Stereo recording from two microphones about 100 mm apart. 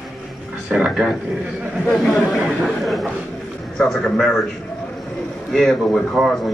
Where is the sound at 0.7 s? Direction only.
15° right (ahead or behind).